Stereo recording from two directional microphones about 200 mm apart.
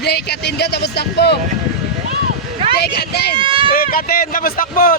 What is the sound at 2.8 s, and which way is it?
Speech, 55° left (ahead or behind).